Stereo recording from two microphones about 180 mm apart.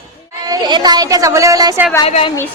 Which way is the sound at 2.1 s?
30° left (ahead or behind).